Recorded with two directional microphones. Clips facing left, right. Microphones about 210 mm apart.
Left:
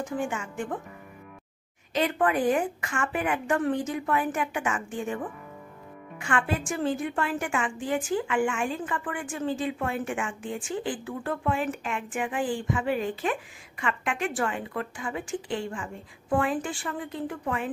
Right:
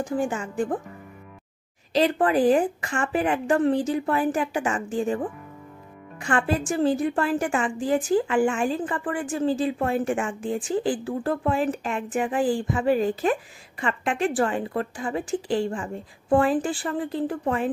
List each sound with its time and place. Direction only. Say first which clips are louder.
0.0 s a woman's voice: right 5 dB; 35° right (ahead or behind)
2.0 s a woman's voice: right 5 dB; 35° right (ahead or behind)